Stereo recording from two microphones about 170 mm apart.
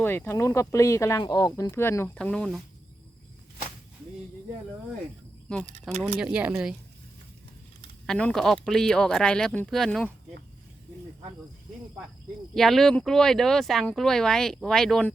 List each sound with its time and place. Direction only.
0.0 s speech: 10° left (ahead or behind)
6.1 s speech: 5° right (ahead or behind)
8.0 s speech: 5° left (ahead or behind)
12.5 s speech: centre (ahead or behind)